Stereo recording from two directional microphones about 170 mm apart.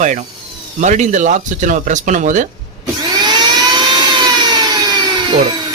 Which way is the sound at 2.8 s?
25° right (ahead or behind).